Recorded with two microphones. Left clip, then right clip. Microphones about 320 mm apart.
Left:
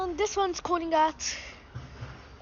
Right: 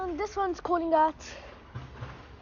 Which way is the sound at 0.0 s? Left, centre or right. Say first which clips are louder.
Left 3 dB; centre.